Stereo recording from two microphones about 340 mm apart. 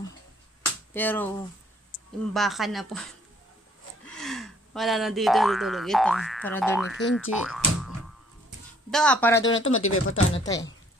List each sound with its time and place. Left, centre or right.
0.9 s speech: centre
2.3 s speech: centre
7.0 s speech: left
7.4 s music: centre
8.9 s speech: centre
9.4 s speech: left
10.3 s speech: centre